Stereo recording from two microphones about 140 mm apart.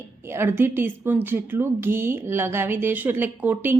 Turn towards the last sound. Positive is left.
turn(degrees=-15)  # may be behind; listen again after turning